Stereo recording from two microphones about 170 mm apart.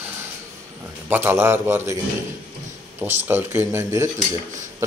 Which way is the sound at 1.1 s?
15° right (ahead or behind).